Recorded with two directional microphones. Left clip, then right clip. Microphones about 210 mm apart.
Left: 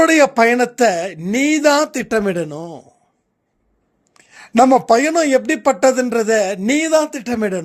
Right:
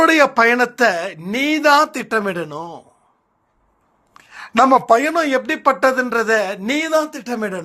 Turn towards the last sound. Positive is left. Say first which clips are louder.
# left 3 dB
turn(degrees=50)  # may be behind; listen again after turning